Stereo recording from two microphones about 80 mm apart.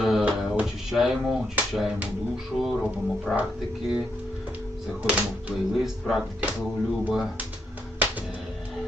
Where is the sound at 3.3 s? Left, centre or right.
Centre.